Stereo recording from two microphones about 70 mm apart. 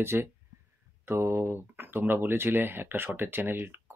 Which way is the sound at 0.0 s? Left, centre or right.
Right.